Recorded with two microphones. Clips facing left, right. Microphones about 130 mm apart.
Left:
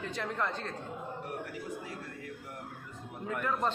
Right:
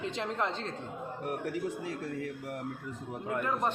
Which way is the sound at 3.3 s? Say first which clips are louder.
Right 1 dB; 15° right (ahead or behind).